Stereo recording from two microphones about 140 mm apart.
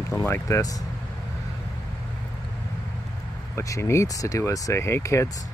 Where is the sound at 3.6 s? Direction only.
20° left (ahead or behind).